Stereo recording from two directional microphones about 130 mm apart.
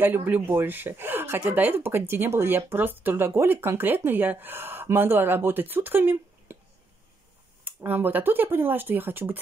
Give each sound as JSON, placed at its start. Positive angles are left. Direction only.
{"t": 0.0, "sound": "speech", "side_deg": -15}
{"t": 7.6, "sound": "speech", "side_deg": -15}